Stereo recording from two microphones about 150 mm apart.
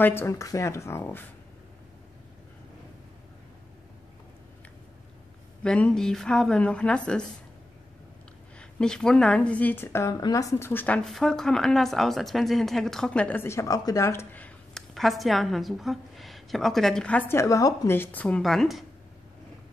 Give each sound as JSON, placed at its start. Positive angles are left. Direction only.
{"t": 0.0, "sound": "a woman's voice", "side_deg": 15}
{"t": 5.6, "sound": "speech", "side_deg": 5}
{"t": 8.5, "sound": "a woman's voice", "side_deg": 5}
{"t": 11.1, "sound": "speech", "side_deg": 5}